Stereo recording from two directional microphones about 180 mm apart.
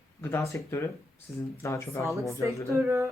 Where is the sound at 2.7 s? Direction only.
15° right (ahead or behind).